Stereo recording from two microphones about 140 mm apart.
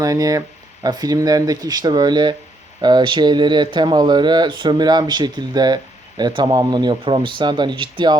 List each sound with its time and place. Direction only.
0.0 s speech: 25° right (ahead or behind)